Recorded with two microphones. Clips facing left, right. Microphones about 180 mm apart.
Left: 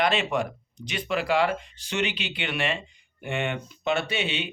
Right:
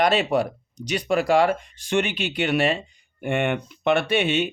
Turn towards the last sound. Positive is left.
turn(degrees=-50)  # may be behind; listen again after turning